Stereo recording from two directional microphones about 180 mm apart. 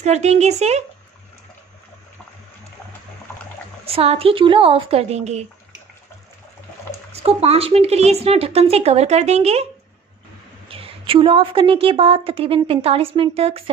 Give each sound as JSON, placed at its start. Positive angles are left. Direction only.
{"t": 0.0, "sound": "a woman's voice", "side_deg": -40}
{"t": 3.8, "sound": "a woman's voice", "side_deg": -35}
{"t": 7.1, "sound": "a woman's voice", "side_deg": -35}
{"t": 10.7, "sound": "a woman's voice", "side_deg": -30}